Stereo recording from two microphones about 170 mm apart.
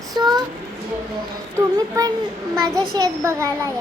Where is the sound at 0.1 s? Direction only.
25° right (ahead or behind).